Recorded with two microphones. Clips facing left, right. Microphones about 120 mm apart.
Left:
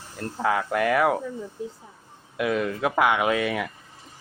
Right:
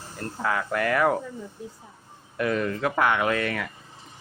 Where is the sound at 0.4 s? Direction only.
15° left (ahead or behind).